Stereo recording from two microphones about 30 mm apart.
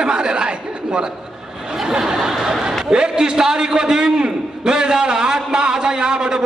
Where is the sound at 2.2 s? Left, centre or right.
Centre.